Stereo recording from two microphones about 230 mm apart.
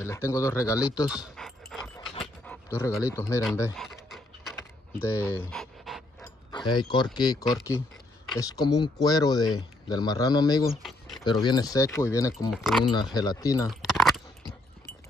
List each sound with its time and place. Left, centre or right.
0.0 s speech: centre
1.0 s dog: centre
3.0 s speech: centre
3.7 s pant: centre
4.9 s pant: centre
6.2 s mechanisms: centre
7.2 s speech: centre
10.8 s a sound: centre
11.2 s speech: centre
12.4 s speech: centre
12.9 s speech: centre
13.7 s a sound: centre